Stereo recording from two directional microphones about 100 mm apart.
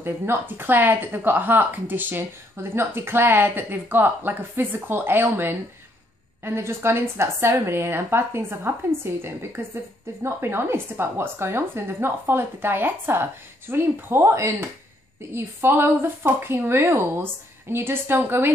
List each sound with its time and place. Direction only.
0.0 s a woman's voice: 20° right (ahead or behind)